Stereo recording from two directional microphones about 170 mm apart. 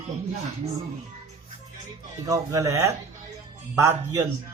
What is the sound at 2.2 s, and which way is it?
Speech, 20° right (ahead or behind).